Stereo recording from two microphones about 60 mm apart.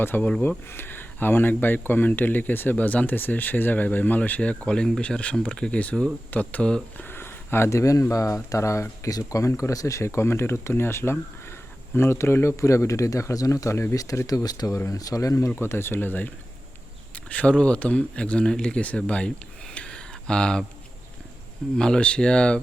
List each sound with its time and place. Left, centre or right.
0.0 s speech: left; by 6.8 s centre
7.1 s a sound: left
7.7 s speech: left
13.9 s speech: left
15.5 s speech: left
17.2 s speech: left
19.7 s a sound: centre
21.8 s speech: centre